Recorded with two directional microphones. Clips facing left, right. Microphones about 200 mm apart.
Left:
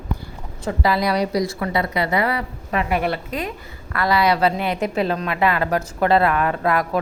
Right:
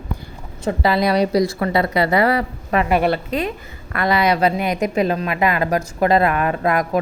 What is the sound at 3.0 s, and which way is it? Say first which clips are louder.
A woman's voice: right 5 dB; 30° right (ahead or behind).